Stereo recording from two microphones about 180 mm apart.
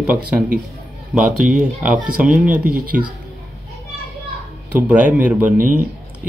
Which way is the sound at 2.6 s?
55° right (ahead or behind).